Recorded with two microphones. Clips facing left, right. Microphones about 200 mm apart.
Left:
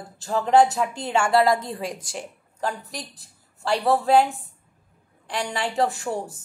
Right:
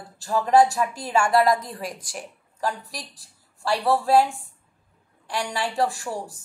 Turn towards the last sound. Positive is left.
turn(degrees=25)  # may be behind; listen again after turning